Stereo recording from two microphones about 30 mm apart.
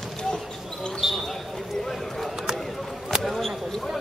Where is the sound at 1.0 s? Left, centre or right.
Centre.